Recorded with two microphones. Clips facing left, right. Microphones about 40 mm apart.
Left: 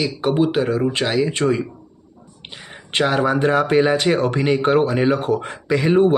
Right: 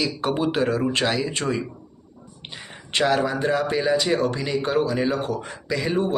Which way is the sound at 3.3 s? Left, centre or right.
Left.